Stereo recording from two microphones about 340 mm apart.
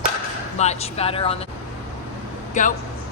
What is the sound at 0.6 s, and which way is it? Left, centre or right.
Speech, centre.